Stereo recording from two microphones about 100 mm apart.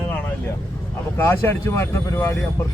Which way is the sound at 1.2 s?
20° left (ahead or behind).